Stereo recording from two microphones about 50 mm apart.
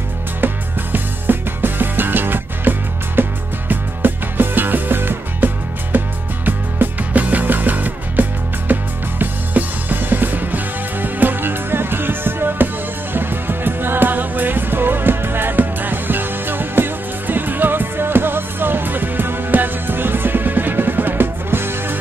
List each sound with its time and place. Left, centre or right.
0.9 s music: right